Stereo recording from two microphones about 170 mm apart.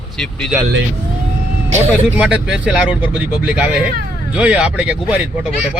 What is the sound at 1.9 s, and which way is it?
Speech, 5° right (ahead or behind).